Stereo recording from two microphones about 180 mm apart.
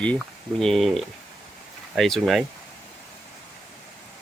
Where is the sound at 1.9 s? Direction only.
Centre (ahead or behind).